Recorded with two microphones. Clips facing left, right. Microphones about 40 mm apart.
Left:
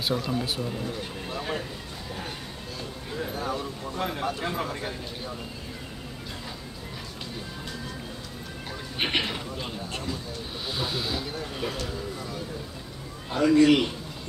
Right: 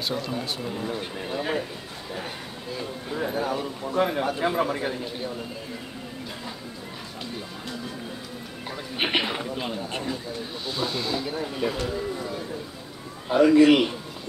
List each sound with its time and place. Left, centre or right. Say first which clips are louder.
0.1 s speech: left 1 dB; centre
1.2 s a sound: right 4 dB; centre
2.1 s music: right 4 dB; centre
4.0 s speech: right 6 dB; centre
8.9 s a sound: right 2 dB; centre
10.7 s speech: right 3 dB; centre
11.2 s speech: right 4 dB; centre
11.8 s a sound: right 5 dB; centre
13.3 s speech: right 3 dB; centre